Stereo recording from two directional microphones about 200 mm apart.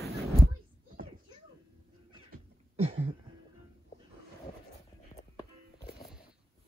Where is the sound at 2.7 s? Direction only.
30° right (ahead or behind).